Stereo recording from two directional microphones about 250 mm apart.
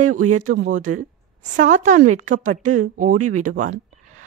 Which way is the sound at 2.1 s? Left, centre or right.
Right.